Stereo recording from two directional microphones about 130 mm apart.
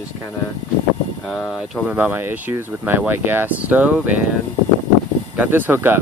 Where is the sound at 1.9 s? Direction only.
10° right (ahead or behind).